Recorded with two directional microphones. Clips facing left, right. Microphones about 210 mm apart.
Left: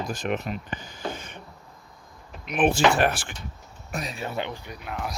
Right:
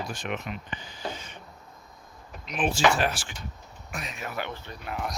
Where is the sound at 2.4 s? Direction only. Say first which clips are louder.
Left 4 dB; 60° left (ahead or behind).